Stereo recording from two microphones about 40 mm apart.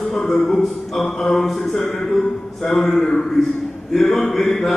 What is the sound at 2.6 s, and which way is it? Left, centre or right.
Speech, centre.